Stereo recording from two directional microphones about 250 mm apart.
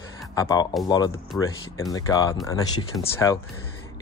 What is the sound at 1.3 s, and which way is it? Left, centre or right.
Speech, centre.